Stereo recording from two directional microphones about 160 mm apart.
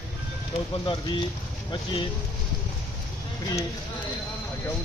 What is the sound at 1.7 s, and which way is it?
Speech, 30° left (ahead or behind).